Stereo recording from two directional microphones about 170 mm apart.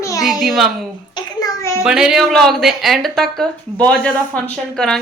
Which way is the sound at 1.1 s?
20° left (ahead or behind).